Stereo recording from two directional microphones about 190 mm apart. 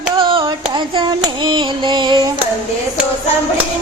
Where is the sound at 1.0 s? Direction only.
25° right (ahead or behind).